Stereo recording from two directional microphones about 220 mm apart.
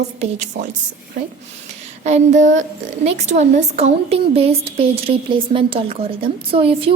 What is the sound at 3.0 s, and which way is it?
A woman's voice, 30° right (ahead or behind).